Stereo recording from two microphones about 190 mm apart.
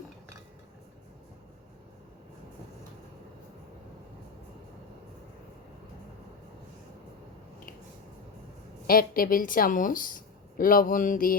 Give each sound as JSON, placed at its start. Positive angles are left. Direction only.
{"t": 8.9, "sound": "speech", "side_deg": 50}